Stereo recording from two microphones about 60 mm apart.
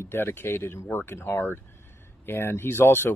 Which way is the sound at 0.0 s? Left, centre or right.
Left.